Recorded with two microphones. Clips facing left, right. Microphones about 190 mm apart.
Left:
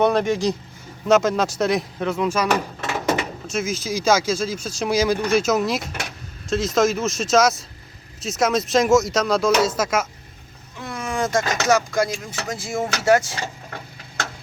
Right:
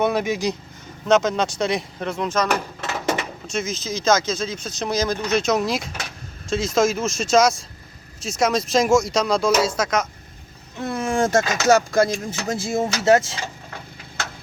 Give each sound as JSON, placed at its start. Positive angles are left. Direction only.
{"t": 0.0, "sound": "speech", "side_deg": -5}
{"t": 1.0, "sound": "speech", "side_deg": 5}
{"t": 10.8, "sound": "speech", "side_deg": -30}